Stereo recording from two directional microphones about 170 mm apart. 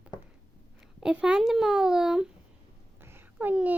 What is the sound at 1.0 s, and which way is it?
Speech, 5° right (ahead or behind).